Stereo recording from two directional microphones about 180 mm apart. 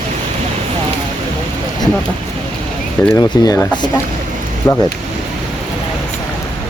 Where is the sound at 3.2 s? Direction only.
20° left (ahead or behind).